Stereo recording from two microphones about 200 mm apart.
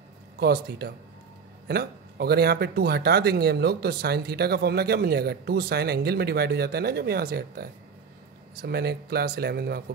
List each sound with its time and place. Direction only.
0.4 s speech: 55° right (ahead or behind)